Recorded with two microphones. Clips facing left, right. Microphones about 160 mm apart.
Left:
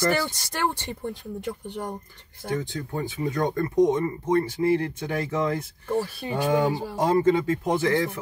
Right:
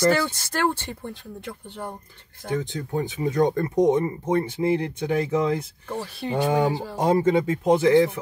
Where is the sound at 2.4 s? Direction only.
15° right (ahead or behind).